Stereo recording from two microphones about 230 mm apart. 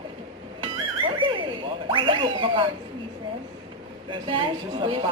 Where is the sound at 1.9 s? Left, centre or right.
Right.